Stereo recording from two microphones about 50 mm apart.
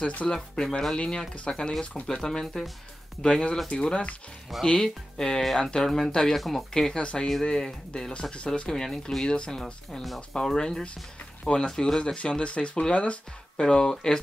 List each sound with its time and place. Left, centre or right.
0.0 s speech: left
2.4 s speech: centre
3.2 s speech: centre
12.0 s speech: left